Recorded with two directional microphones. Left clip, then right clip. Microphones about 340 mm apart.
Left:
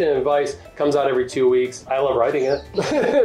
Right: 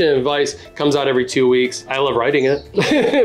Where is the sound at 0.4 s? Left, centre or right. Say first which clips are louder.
Right 2 dB; right.